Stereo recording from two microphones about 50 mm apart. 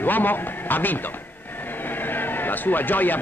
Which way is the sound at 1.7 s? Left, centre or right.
Left.